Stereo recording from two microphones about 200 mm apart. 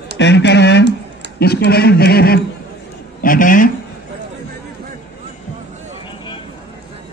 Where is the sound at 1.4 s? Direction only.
50° left (ahead or behind).